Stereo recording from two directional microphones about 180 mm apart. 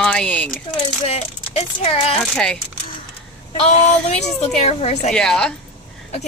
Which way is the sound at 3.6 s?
35° left (ahead or behind).